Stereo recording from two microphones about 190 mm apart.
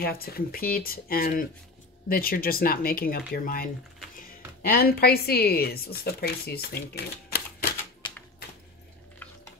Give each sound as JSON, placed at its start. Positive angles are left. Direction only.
{"t": 0.0, "sound": "speech", "side_deg": 55}